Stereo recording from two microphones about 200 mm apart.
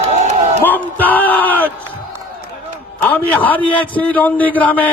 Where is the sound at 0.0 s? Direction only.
35° right (ahead or behind).